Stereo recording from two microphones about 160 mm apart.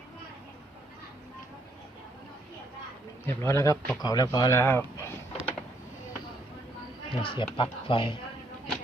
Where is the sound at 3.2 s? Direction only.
15° left (ahead or behind).